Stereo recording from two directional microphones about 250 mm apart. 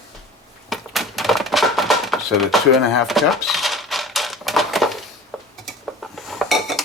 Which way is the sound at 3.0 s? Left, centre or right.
Centre.